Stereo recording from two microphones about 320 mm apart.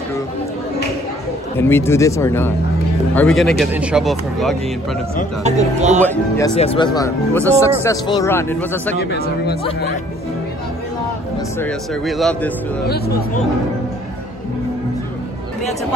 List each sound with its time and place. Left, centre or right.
1.6 s speech: centre
5.4 s speech: right
6.0 s speech: centre
8.9 s speech: left
11.6 s speech: centre
12.8 s speech: left